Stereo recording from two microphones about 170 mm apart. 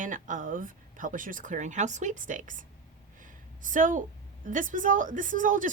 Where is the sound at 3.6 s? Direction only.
50° right (ahead or behind).